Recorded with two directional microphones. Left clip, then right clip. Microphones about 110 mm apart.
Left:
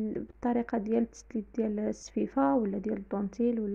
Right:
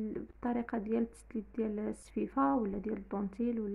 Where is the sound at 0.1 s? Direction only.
25° left (ahead or behind).